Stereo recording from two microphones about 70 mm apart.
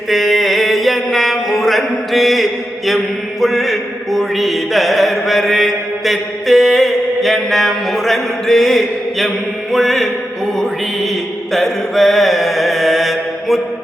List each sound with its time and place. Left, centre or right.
0.1 s mantra: centre